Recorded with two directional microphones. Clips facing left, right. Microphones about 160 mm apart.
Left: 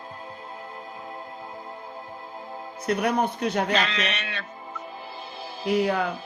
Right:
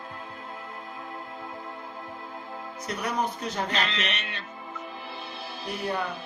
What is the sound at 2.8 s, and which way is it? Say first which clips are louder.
Speech: left 6 dB; 60° left (ahead or behind).